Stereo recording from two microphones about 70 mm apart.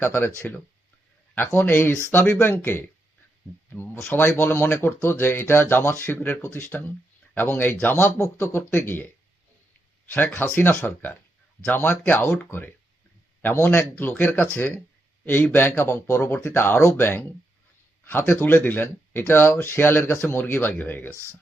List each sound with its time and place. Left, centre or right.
0.0 s speech: left
10.1 s speech: left
14.6 s a sound: left
15.5 s speech: left